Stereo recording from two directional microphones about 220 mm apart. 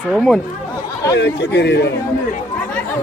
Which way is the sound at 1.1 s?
50° left (ahead or behind).